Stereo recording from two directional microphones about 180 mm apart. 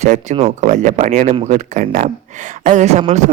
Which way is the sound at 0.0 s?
40° right (ahead or behind).